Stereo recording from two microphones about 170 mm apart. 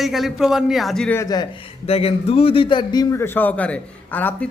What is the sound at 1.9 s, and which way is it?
A man's voice, 35° left (ahead or behind).